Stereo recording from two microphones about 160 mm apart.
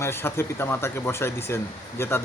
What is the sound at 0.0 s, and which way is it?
Speech, 15° left (ahead or behind).